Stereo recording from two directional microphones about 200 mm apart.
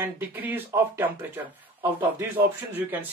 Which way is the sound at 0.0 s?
10° right (ahead or behind).